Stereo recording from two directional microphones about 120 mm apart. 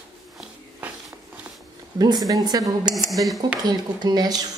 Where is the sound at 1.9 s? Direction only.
30° right (ahead or behind).